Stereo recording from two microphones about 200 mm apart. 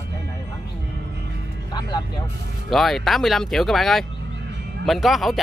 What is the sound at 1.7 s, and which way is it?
Music, 20° left (ahead or behind).